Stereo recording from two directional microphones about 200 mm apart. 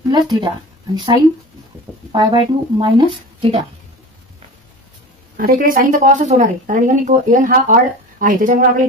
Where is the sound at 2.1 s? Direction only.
20° right (ahead or behind).